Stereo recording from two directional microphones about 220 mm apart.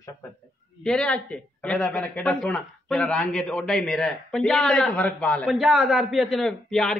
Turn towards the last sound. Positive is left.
turn(degrees=0)  # may be behind; listen again after turning